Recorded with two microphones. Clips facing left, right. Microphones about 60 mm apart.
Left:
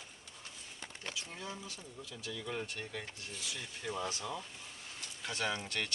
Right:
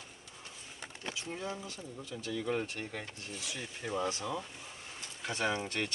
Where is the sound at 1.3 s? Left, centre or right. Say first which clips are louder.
Right 5 dB; right.